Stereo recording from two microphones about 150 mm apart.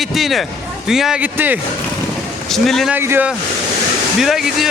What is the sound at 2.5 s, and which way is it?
Speech, centre (ahead or behind).